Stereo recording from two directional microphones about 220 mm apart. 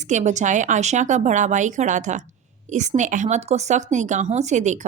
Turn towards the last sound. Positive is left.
turn(degrees=-35)  # may be behind; listen again after turning